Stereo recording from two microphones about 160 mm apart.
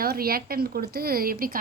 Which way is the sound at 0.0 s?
70° right (ahead or behind).